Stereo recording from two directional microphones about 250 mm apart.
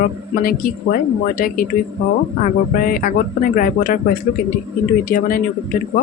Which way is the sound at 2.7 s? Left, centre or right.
Left.